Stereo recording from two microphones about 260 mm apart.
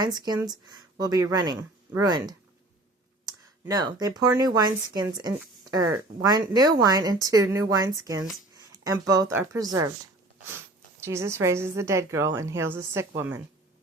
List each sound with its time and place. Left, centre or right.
0.0 s a woman's voice: centre
11.0 s a woman's voice: centre